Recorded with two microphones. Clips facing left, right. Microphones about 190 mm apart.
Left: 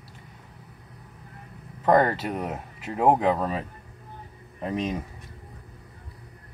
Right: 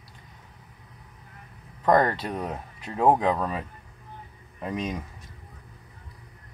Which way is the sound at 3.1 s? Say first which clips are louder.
Left 1 dB; 30° left (ahead or behind).